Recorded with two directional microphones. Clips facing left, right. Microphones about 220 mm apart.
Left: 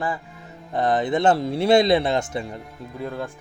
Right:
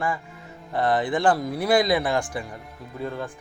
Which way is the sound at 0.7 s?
20° left (ahead or behind).